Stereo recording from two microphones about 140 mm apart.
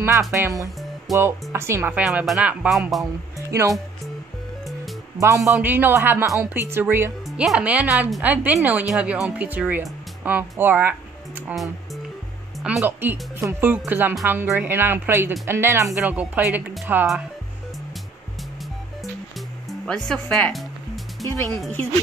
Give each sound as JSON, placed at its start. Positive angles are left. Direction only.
{"t": 0.3, "sound": "a woman's voice", "side_deg": -20}
{"t": 2.0, "sound": "speech", "side_deg": -5}
{"t": 3.4, "sound": "speech", "side_deg": -20}
{"t": 5.2, "sound": "a woman's voice", "side_deg": -20}
{"t": 7.2, "sound": "a woman's voice", "side_deg": -5}
{"t": 12.5, "sound": "music", "side_deg": 0}
{"t": 12.8, "sound": "a woman's voice", "side_deg": -15}
{"t": 19.7, "sound": "music", "side_deg": 5}
{"t": 21.3, "sound": "speech", "side_deg": 15}